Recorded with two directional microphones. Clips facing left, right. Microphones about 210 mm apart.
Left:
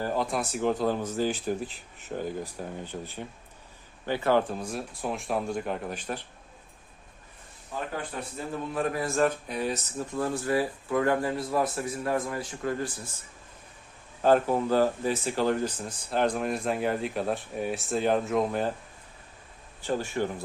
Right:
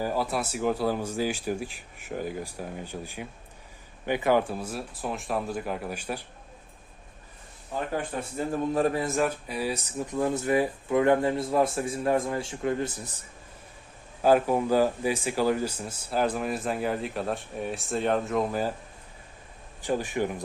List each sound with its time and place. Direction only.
0.0 s speech: 5° right (ahead or behind)
8.7 s a man's voice: 35° right (ahead or behind)
9.0 s speech: 15° right (ahead or behind)
14.2 s speech: 10° right (ahead or behind)
19.8 s speech: 15° right (ahead or behind)